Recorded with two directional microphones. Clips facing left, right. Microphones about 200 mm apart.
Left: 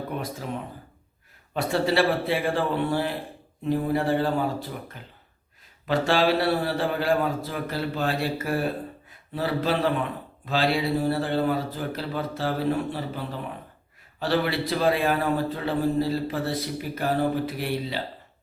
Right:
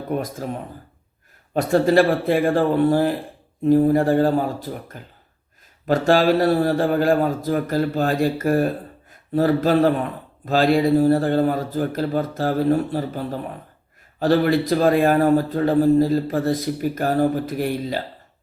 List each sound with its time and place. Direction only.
0.1 s speech: 45° right (ahead or behind)
1.5 s speech: 45° right (ahead or behind)